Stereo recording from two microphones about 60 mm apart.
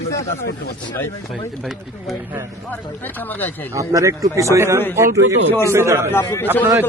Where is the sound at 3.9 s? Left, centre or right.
Right.